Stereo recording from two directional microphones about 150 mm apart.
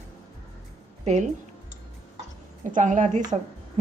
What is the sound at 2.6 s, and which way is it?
Speech, 60° right (ahead or behind).